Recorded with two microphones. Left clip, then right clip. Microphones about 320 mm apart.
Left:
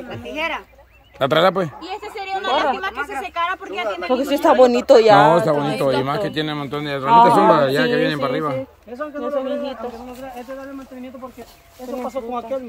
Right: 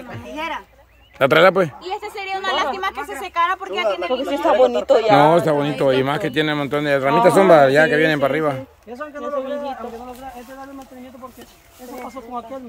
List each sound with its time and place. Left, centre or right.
0.3 s speech: centre
1.2 s a man's voice: centre
4.1 s speech: left
5.2 s a man's voice: centre